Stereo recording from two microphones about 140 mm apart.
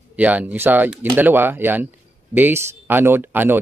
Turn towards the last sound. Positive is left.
turn(degrees=-15)  # may be behind; listen again after turning